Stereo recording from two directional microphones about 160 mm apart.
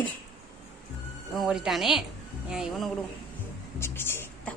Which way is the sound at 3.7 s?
15° left (ahead or behind).